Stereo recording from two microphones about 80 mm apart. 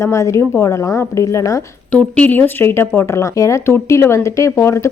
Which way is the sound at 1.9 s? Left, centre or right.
Centre.